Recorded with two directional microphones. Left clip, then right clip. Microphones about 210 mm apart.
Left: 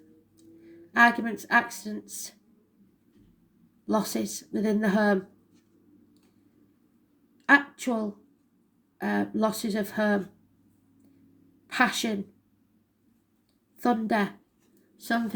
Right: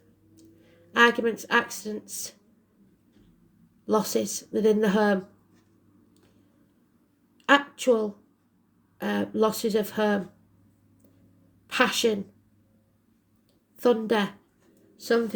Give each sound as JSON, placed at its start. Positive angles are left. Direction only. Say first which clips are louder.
{"t": 0.9, "sound": "speech", "louder": "right 1 dB", "side_deg": -35}
{"t": 3.8, "sound": "speech", "louder": "right 4 dB", "side_deg": -35}
{"t": 7.4, "sound": "a sound", "louder": "right 1 dB", "side_deg": -35}
{"t": 9.0, "sound": "speech", "louder": "right 2 dB", "side_deg": -35}
{"t": 11.7, "sound": "a woman's voice", "louder": "right 3 dB", "side_deg": -35}
{"t": 13.8, "sound": "a woman's voice", "louder": "right 3 dB", "side_deg": -35}